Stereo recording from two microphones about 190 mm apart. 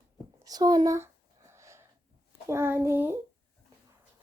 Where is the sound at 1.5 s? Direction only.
15° right (ahead or behind).